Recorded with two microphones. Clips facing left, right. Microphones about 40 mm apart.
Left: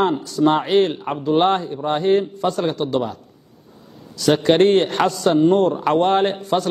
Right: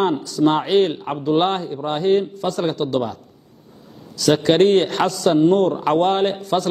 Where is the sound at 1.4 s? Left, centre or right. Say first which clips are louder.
Left 2 dB; left.